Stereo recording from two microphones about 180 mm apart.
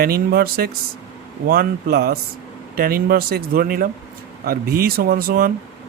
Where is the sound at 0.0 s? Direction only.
60° right (ahead or behind).